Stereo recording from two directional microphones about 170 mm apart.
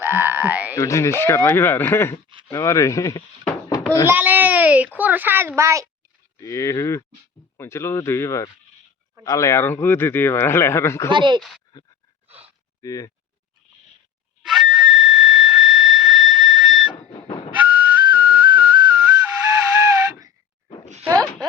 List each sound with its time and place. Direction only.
0.0 s speech: 10° right (ahead or behind)
0.8 s speech: 15° left (ahead or behind)
4.1 s a child's voice: 10° right (ahead or behind)
6.4 s speech: 20° left (ahead or behind)
11.1 s speech: 30° right (ahead or behind)
11.3 s speech: centre (ahead or behind)
12.8 s speech: 20° left (ahead or behind)
14.4 s whistle: centre (ahead or behind)
17.1 s train: 30° left (ahead or behind)
17.6 s whistle: 10° right (ahead or behind)
18.4 s whistle: 25° right (ahead or behind)
20.1 s a sound: 20° right (ahead or behind)